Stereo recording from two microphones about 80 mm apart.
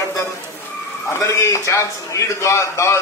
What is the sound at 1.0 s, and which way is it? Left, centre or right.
A man's voice, left.